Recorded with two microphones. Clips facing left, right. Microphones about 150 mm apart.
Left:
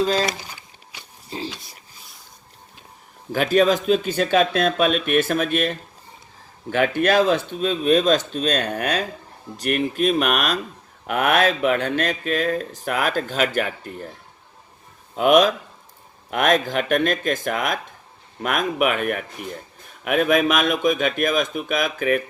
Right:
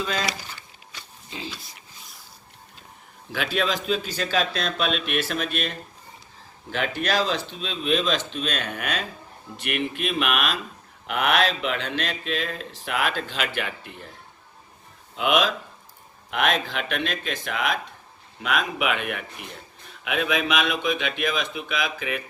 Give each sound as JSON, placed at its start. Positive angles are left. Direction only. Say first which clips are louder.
{"t": 0.0, "sound": "speech", "louder": "left 8 dB", "side_deg": 35}
{"t": 1.3, "sound": "dog", "louder": "left 6 dB", "side_deg": 35}
{"t": 3.3, "sound": "speech", "louder": "left 8 dB", "side_deg": 45}
{"t": 15.1, "sound": "speech", "louder": "left 7 dB", "side_deg": 45}